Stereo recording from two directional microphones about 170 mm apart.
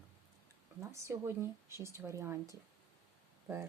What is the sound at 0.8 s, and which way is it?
Speech, 15° right (ahead or behind).